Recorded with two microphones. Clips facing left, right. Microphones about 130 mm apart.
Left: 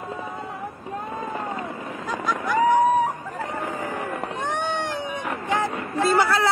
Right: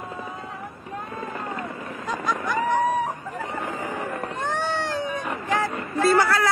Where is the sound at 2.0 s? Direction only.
Centre (ahead or behind).